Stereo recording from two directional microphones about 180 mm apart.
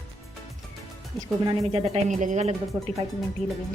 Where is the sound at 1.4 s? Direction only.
30° right (ahead or behind).